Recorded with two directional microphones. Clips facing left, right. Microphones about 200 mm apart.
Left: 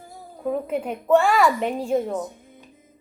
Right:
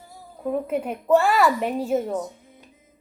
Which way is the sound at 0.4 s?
Centre (ahead or behind).